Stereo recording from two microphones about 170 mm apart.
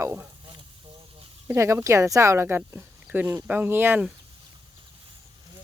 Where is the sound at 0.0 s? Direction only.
15° right (ahead or behind).